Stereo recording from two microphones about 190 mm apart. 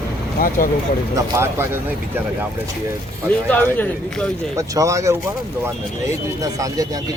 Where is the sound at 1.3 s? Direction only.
10° right (ahead or behind).